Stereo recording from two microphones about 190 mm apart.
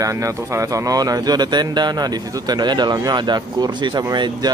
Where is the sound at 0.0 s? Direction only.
15° right (ahead or behind).